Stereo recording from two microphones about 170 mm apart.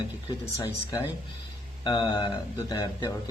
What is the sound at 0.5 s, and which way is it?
Speech, 20° left (ahead or behind).